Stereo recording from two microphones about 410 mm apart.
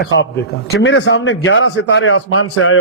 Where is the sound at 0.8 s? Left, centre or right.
Left.